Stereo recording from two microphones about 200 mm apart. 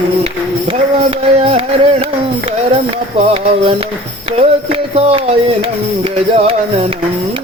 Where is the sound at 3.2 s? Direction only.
30° right (ahead or behind).